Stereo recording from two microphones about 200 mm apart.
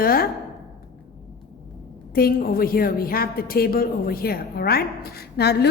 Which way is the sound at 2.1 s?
50° left (ahead or behind).